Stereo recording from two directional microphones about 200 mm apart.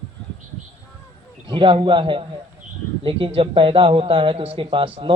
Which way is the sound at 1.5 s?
25° right (ahead or behind).